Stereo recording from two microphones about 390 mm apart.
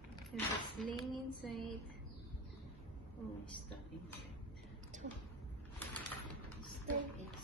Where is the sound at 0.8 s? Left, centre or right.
Centre.